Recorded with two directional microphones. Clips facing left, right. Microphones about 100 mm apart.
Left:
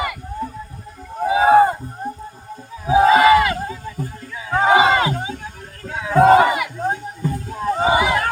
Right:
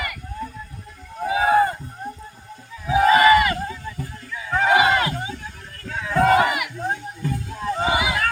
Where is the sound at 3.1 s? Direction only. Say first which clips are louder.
Left 1 dB; 90° left.